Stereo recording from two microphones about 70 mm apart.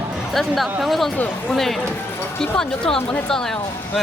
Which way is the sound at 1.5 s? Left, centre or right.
Centre.